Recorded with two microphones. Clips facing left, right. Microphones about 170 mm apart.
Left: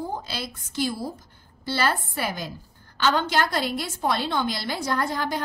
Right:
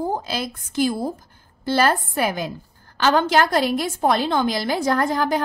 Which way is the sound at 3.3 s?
45° right (ahead or behind).